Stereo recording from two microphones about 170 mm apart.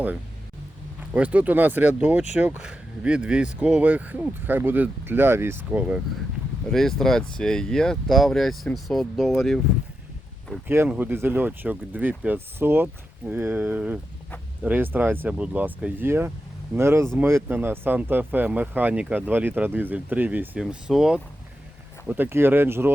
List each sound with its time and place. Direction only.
1.1 s speech: 10° right (ahead or behind)
6.7 s speech: centre (ahead or behind)
10.7 s speech: 10° right (ahead or behind)